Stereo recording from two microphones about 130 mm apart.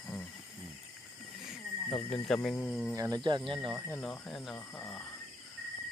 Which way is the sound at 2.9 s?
25° right (ahead or behind).